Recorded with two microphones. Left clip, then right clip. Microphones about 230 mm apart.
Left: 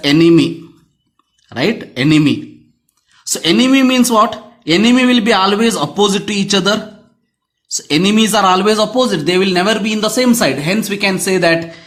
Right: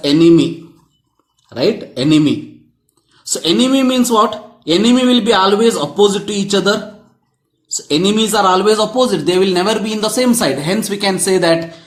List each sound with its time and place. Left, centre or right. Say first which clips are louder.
0.2 s a man's voice: right 2 dB; left
7.8 s a man's voice: left 1 dB; left